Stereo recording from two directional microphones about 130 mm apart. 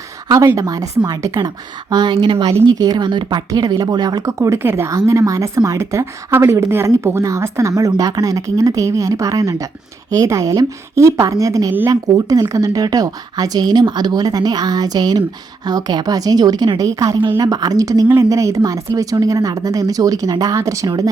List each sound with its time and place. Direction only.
0.3 s a woman's voice: 25° right (ahead or behind)